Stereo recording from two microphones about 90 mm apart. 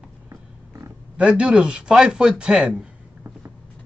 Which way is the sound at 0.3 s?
30° right (ahead or behind).